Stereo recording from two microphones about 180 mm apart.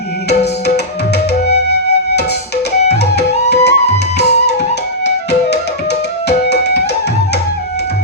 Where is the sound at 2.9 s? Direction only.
65° left (ahead or behind).